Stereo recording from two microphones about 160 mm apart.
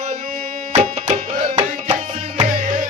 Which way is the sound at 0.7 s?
40° right (ahead or behind).